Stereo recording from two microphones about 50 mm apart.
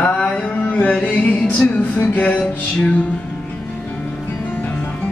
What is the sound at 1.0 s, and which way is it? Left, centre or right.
Music, left.